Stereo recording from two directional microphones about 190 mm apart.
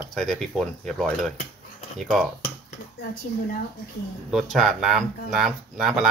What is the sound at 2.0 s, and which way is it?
Speech, centre (ahead or behind).